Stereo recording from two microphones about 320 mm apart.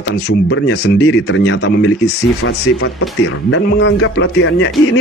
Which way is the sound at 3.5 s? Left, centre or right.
Left.